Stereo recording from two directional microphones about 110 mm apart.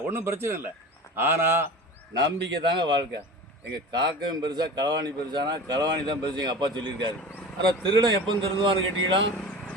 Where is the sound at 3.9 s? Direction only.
40° right (ahead or behind).